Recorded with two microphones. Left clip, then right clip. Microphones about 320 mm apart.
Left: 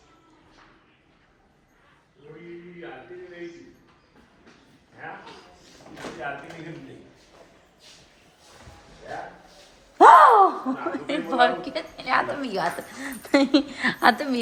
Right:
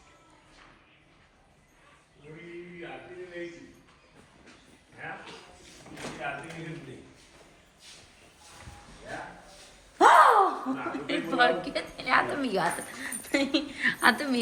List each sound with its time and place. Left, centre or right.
5.0 s a sound: left
10.0 s gasp: left; by 12.7 s centre
13.2 s speech: left
14.0 s a woman's voice: centre